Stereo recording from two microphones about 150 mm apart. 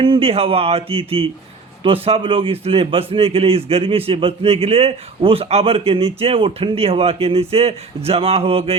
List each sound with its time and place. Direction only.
0.0 s a man's voice: 35° right (ahead or behind)